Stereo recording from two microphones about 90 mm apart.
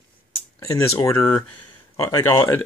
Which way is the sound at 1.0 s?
35° left (ahead or behind).